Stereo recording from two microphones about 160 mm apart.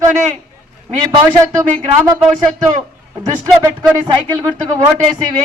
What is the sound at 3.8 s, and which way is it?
Speech, 15° right (ahead or behind).